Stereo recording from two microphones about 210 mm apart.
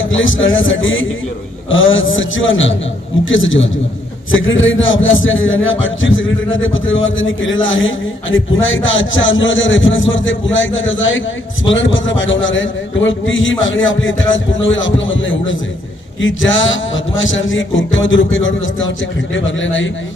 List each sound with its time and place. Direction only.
0.0 s a man's voice: 65° left (ahead or behind)